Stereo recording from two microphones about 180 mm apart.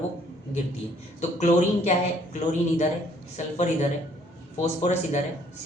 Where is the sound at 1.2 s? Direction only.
40° left (ahead or behind).